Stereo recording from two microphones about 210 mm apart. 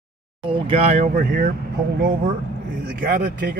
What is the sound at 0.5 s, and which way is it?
Speech, 25° right (ahead or behind).